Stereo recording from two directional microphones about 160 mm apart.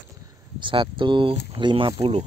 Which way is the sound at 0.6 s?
30° right (ahead or behind).